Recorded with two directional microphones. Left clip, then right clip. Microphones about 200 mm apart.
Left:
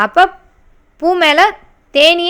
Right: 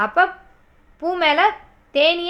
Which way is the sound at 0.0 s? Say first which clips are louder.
Left 7 dB; 45° left (ahead or behind).